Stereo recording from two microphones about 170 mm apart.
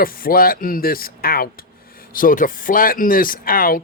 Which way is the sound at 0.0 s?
60° left (ahead or behind).